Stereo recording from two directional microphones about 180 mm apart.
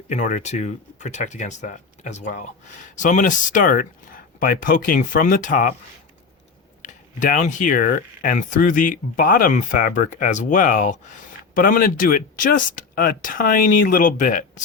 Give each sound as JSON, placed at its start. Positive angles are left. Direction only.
{"t": 0.1, "sound": "speech", "side_deg": 45}
{"t": 6.8, "sound": "speech", "side_deg": 45}